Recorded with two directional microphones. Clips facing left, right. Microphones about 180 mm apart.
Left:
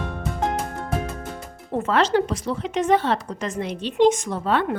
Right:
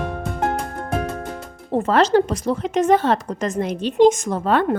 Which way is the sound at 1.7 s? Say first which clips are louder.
Right 4 dB; 35° right (ahead or behind).